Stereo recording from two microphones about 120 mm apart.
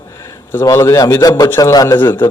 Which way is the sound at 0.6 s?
25° left (ahead or behind).